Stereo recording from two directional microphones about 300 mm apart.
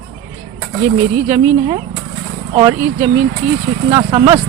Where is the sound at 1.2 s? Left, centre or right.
Centre.